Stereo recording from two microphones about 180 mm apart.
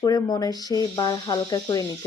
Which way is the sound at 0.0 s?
20° left (ahead or behind).